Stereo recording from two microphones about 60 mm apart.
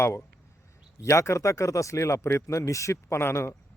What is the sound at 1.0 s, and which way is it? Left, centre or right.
Speech, left.